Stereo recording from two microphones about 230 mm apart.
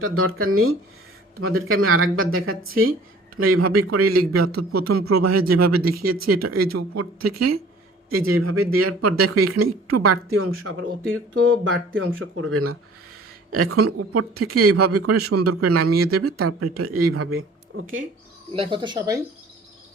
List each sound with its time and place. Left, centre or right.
0.0 s speech: right
8.1 s speech: right
17.1 s speech: right
18.5 s speech: right